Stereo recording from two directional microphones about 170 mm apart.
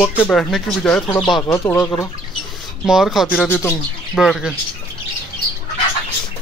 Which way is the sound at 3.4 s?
15° left (ahead or behind).